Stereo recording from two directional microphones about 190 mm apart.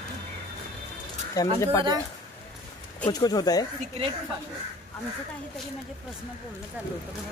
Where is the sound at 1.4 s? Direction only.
20° left (ahead or behind).